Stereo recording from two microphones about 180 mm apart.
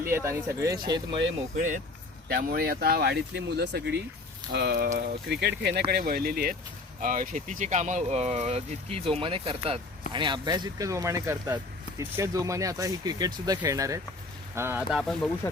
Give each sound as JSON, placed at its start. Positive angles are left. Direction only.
{"t": 0.1, "sound": "speech", "side_deg": -15}
{"t": 1.5, "sound": "speech", "side_deg": -45}
{"t": 2.3, "sound": "speech", "side_deg": -55}
{"t": 4.9, "sound": "speech", "side_deg": -50}
{"t": 5.3, "sound": "speech", "side_deg": -65}